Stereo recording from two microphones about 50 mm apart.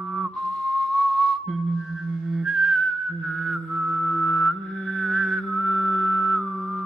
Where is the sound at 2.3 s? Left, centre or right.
Centre.